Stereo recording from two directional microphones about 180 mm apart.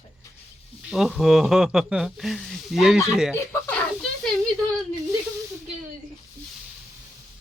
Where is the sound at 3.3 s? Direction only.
10° left (ahead or behind).